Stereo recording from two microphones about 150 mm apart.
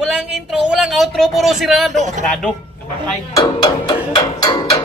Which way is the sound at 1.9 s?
55° right (ahead or behind).